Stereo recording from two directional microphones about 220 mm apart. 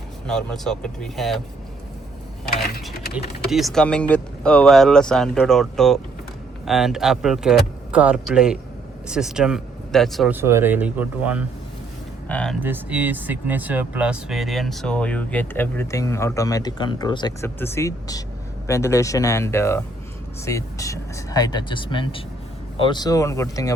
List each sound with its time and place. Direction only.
0.3 s speech: centre (ahead or behind)
3.5 s speech: centre (ahead or behind)
12.3 s speech: 5° left (ahead or behind)
12.5 s speech: 10° right (ahead or behind); by 23.7 s 15° left (ahead or behind)